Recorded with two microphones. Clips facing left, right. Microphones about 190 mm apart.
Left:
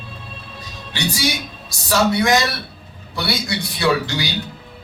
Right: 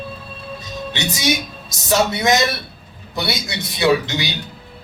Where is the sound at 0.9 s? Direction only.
20° right (ahead or behind).